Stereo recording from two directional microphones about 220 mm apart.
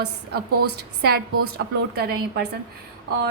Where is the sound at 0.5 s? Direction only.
90° right.